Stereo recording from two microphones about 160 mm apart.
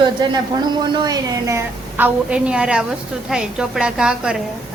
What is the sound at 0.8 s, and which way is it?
Speech, 25° right (ahead or behind).